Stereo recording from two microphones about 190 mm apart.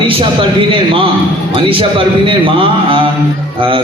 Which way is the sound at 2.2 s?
25° right (ahead or behind).